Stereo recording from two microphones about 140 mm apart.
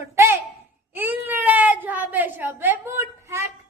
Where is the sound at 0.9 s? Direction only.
15° right (ahead or behind).